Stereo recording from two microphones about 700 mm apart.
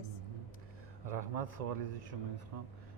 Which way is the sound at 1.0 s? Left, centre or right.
Right.